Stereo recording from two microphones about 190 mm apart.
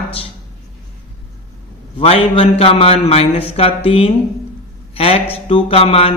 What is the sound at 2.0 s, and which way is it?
Speech, 30° left (ahead or behind).